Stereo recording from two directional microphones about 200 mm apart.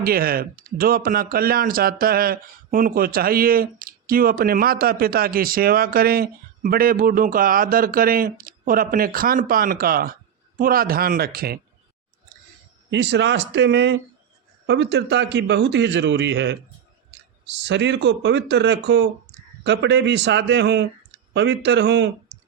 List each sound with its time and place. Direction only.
0.0 s speech: 45° right (ahead or behind)
12.9 s a man's voice: 60° right (ahead or behind)